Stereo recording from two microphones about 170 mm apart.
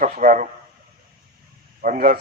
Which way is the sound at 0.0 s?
50° right (ahead or behind).